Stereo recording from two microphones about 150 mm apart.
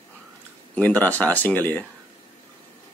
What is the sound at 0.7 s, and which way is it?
Speech, 10° left (ahead or behind).